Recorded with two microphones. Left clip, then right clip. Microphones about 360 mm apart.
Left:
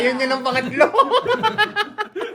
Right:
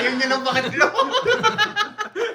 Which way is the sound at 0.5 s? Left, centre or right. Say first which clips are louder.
Left 6 dB; centre.